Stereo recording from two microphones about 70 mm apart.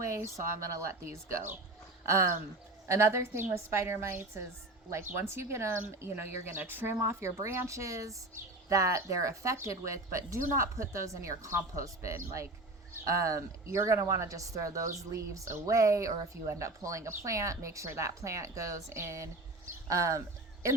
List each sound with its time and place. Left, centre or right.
0.1 s speech: right
2.8 s speech: right